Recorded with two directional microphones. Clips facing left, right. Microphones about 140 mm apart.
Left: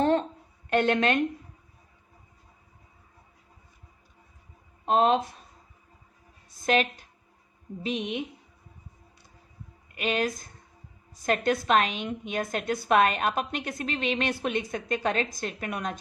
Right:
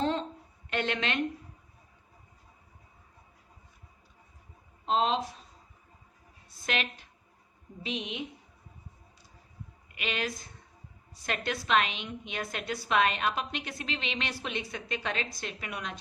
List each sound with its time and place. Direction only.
0.0 s a sound: 55° left (ahead or behind)
0.7 s a woman's voice: 50° left (ahead or behind)
4.9 s speech: 55° left (ahead or behind)
6.5 s a sound: 45° left (ahead or behind)
7.8 s a woman's voice: 45° left (ahead or behind)
9.9 s a woman's voice: 45° left (ahead or behind)